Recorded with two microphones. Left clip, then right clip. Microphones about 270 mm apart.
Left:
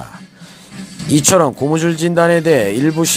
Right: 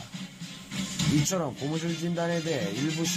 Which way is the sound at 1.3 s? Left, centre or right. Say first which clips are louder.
Left 18 dB; left.